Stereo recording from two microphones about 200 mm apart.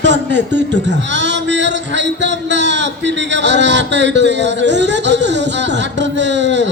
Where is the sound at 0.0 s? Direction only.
60° right (ahead or behind).